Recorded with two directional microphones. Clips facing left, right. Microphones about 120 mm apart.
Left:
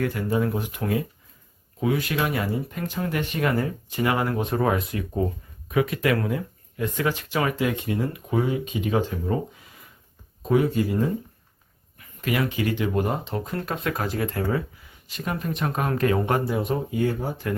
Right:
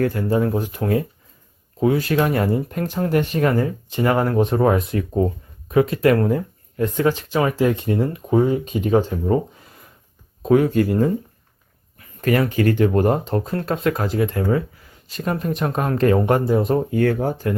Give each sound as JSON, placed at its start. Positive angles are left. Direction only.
{"t": 0.0, "sound": "speech", "side_deg": -30}
{"t": 10.5, "sound": "speech", "side_deg": -55}
{"t": 11.9, "sound": "speech", "side_deg": -40}
{"t": 13.7, "sound": "speech", "side_deg": -25}
{"t": 15.1, "sound": "speech", "side_deg": -40}
{"t": 16.5, "sound": "speech", "side_deg": -45}
{"t": 17.1, "sound": "speech", "side_deg": -70}